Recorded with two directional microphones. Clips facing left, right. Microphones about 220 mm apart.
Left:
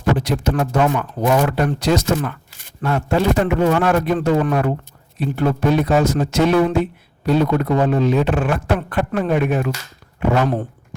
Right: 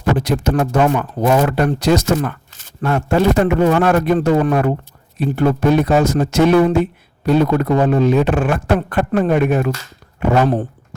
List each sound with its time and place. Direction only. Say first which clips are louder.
0.2 s a man's voice: right 3 dB; 45° right (ahead or behind)
10.4 s speech: right 3 dB; 35° right (ahead or behind)